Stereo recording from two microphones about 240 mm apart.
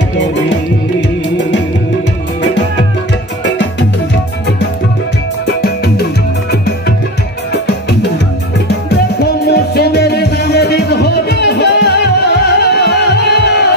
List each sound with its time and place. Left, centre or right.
9.2 s music: left